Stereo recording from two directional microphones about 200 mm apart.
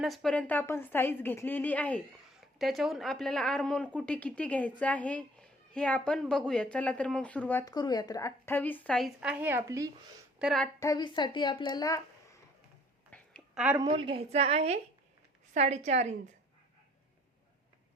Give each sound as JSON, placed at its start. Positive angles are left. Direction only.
{"t": 0.0, "sound": "a woman's voice", "side_deg": 0}
{"t": 10.3, "sound": "a woman's voice", "side_deg": 0}
{"t": 10.8, "sound": "speech", "side_deg": 20}
{"t": 13.1, "sound": "a sound", "side_deg": 0}
{"t": 13.7, "sound": "a woman's voice", "side_deg": -25}